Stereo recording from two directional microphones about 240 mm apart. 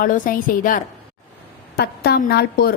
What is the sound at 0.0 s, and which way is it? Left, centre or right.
A woman's voice, left.